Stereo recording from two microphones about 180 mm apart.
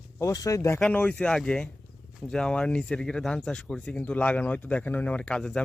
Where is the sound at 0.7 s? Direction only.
5° left (ahead or behind).